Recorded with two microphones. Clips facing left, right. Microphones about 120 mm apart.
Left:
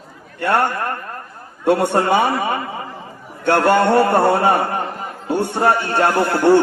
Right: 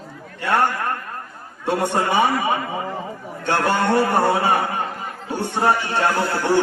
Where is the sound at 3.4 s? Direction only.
60° left (ahead or behind).